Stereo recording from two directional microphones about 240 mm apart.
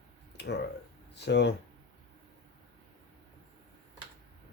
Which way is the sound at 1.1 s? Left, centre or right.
Left.